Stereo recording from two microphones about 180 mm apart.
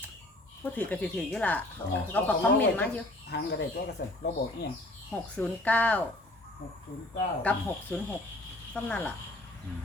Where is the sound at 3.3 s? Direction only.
65° left (ahead or behind).